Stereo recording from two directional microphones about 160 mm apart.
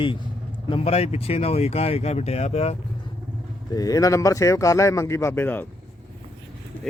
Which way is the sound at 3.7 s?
20° left (ahead or behind).